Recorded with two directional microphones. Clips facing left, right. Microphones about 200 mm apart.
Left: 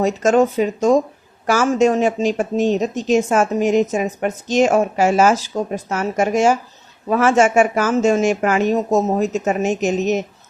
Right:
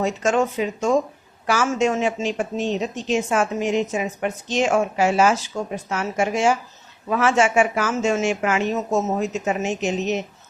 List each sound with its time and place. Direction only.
0.0 s speech: 40° left (ahead or behind)